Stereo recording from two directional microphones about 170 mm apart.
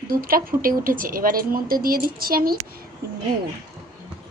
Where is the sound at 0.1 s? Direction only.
60° right (ahead or behind).